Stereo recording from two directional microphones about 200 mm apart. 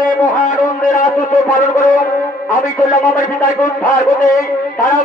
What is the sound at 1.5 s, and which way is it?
Speech, 40° left (ahead or behind).